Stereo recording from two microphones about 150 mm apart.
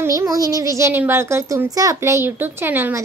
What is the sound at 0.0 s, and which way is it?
Speech, 20° right (ahead or behind).